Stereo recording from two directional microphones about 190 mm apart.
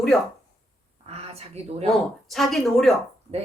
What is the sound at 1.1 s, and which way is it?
Speech, 35° right (ahead or behind).